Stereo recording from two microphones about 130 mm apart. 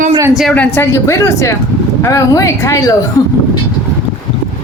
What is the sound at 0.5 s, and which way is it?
Speech, 10° left (ahead or behind).